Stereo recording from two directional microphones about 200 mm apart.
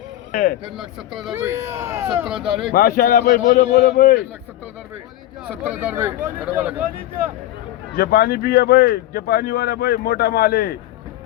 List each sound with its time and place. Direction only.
0.3 s speech: 45° left (ahead or behind)
0.8 s speech: centre (ahead or behind)
2.7 s speech: 45° left (ahead or behind)
5.5 s speech: 5° right (ahead or behind)
7.9 s speech: 50° left (ahead or behind)